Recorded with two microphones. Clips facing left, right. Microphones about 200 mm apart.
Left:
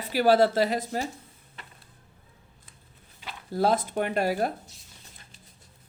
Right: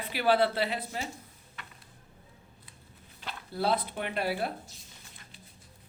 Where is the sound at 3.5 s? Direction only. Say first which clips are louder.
Left 5 dB; 45° left (ahead or behind).